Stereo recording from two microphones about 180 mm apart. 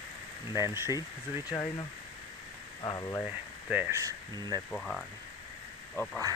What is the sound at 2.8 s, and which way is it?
Speech, 20° left (ahead or behind).